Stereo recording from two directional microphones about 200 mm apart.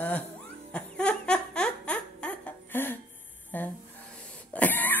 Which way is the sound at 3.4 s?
10° left (ahead or behind).